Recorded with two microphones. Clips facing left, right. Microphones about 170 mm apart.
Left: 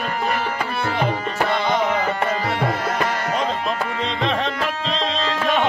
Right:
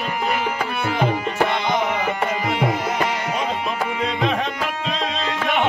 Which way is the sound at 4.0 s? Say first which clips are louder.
Right 2 dB; 5° right (ahead or behind).